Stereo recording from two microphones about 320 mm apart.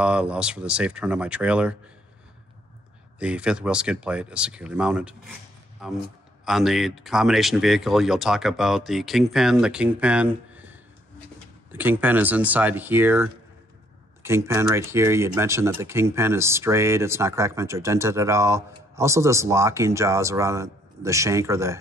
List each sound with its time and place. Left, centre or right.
0.0 s speech: centre
3.2 s speech: centre